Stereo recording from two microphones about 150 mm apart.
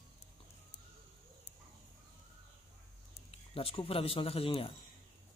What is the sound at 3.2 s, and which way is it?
A man's voice, 40° left (ahead or behind).